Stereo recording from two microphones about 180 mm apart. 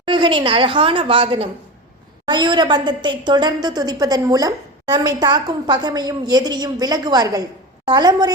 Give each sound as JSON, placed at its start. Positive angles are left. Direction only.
{"t": 0.0, "sound": "a woman's voice", "side_deg": -25}